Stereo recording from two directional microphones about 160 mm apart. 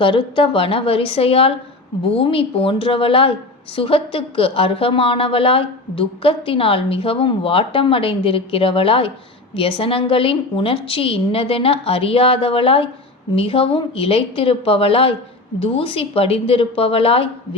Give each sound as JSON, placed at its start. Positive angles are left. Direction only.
{"t": 0.0, "sound": "a woman's voice", "side_deg": 30}